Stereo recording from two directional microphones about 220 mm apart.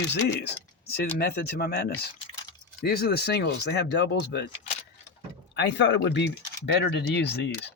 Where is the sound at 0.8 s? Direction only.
45° left (ahead or behind).